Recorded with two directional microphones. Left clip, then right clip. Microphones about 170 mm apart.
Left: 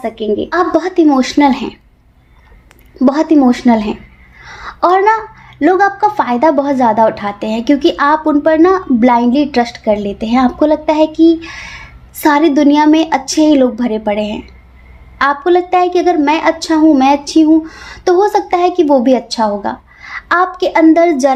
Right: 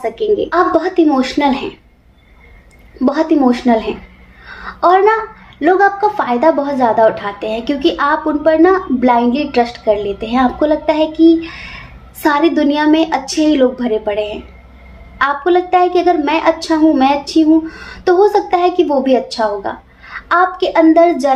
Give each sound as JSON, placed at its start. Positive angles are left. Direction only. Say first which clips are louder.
{"t": 0.0, "sound": "a woman's voice", "louder": "right 2 dB", "side_deg": 55}
{"t": 3.0, "sound": "a woman's voice", "louder": "left 3 dB", "side_deg": 60}
{"t": 4.4, "sound": "a sound", "louder": "even", "side_deg": 65}
{"t": 5.5, "sound": "a woman's voice", "louder": "left 1 dB", "side_deg": 65}